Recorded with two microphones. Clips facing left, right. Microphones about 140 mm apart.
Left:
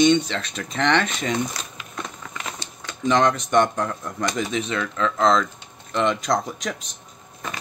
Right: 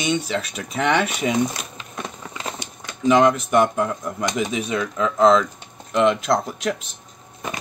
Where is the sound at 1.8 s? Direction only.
30° right (ahead or behind).